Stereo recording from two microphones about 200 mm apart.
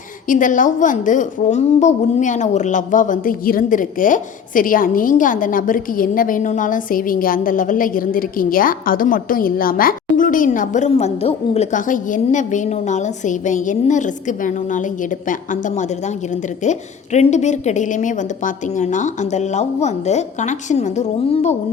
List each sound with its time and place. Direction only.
0.3 s a woman's voice: 40° left (ahead or behind)